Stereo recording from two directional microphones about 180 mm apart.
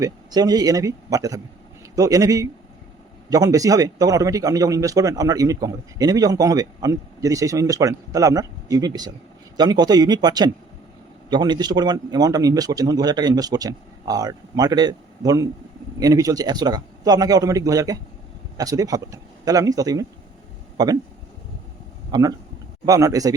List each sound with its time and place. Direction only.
0.0 s speech: 20° right (ahead or behind)
22.1 s speech: 20° right (ahead or behind)